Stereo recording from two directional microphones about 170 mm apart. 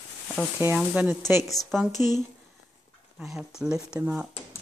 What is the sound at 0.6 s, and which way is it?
Speech, 10° right (ahead or behind).